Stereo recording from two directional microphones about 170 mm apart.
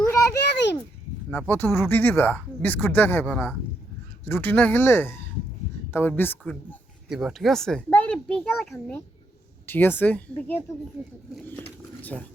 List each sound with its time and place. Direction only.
0.0 s a sound: 15° left (ahead or behind)
1.3 s speech: 10° left (ahead or behind)
7.1 s a child's voice: 5° right (ahead or behind)
12.1 s a child's voice: 5° left (ahead or behind)